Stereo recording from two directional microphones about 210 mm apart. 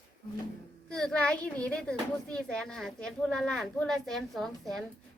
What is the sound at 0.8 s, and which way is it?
A woman's voice, 5° left (ahead or behind).